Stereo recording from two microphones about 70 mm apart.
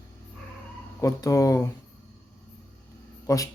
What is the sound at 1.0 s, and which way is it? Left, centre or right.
Speech, left.